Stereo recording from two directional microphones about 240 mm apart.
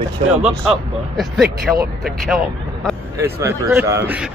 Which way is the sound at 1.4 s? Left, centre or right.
Right.